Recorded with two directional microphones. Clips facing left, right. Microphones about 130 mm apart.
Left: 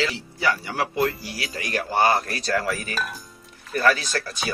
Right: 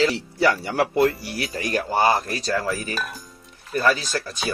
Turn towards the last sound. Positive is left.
turn(degrees=-15)  # may be behind; listen again after turning